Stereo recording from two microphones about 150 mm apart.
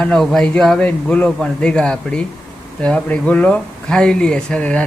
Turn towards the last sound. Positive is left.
turn(degrees=10)  # may be behind; listen again after turning